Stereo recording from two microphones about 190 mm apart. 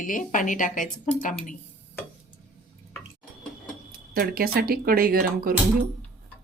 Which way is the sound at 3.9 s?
50° right (ahead or behind).